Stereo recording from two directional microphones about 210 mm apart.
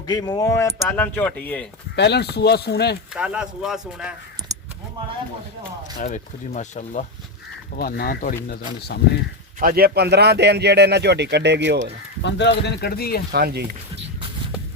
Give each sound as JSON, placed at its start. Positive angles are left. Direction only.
{"t": 0.1, "sound": "speech", "side_deg": 20}
{"t": 2.0, "sound": "speech", "side_deg": 55}
{"t": 3.2, "sound": "speech", "side_deg": -5}
{"t": 6.0, "sound": "speech", "side_deg": 35}
{"t": 7.8, "sound": "speech", "side_deg": 45}
{"t": 9.6, "sound": "speech", "side_deg": -45}
{"t": 12.2, "sound": "speech", "side_deg": 55}
{"t": 13.3, "sound": "speech", "side_deg": -50}